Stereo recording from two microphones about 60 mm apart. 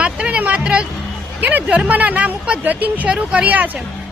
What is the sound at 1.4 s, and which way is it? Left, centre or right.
Speech, right.